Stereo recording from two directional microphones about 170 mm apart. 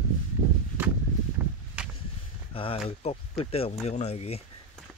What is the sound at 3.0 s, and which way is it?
Speech, 40° left (ahead or behind).